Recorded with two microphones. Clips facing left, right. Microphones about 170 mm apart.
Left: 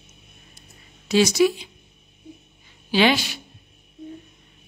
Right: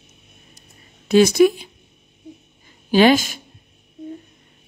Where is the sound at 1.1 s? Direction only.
55° right (ahead or behind).